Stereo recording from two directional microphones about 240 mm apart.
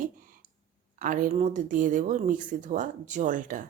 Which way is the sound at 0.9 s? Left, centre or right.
Right.